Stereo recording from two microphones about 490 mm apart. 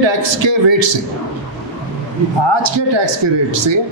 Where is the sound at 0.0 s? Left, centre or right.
Right.